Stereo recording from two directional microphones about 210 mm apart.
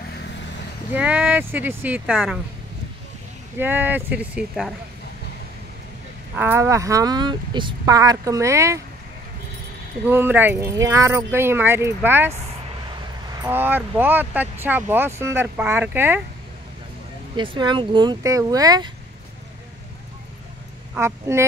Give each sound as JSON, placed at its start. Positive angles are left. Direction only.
{"t": 0.9, "sound": "speech", "side_deg": -5}
{"t": 3.5, "sound": "speech", "side_deg": -10}
{"t": 6.3, "sound": "speech", "side_deg": -10}
{"t": 10.0, "sound": "speech", "side_deg": -10}
{"t": 13.3, "sound": "speech", "side_deg": -15}
{"t": 17.4, "sound": "speech", "side_deg": -20}
{"t": 20.9, "sound": "speech", "side_deg": -10}